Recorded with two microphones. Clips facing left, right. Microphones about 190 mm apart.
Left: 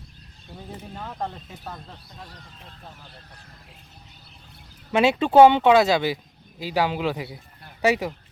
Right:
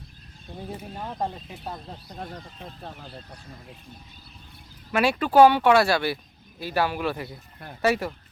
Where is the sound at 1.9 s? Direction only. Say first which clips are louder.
Right 6 dB; 45° right (ahead or behind).